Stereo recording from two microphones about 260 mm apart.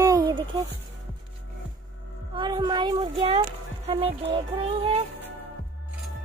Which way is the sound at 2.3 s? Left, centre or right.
Centre.